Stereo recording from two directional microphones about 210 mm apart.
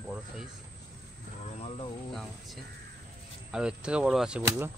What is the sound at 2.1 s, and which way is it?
Speech, centre (ahead or behind).